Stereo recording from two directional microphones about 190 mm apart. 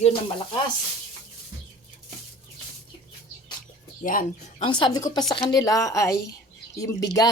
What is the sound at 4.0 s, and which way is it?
Speech, 45° left (ahead or behind).